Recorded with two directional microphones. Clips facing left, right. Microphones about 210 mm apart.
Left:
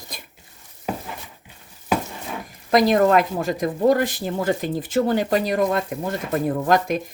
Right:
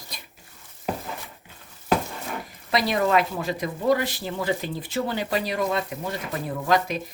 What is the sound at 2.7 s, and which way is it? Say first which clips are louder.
A woman's voice: left 6 dB; 45° left (ahead or behind).